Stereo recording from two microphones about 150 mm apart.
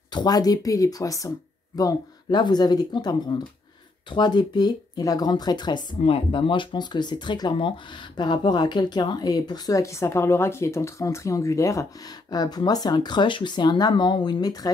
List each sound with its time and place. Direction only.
0.1 s speech: 25° left (ahead or behind)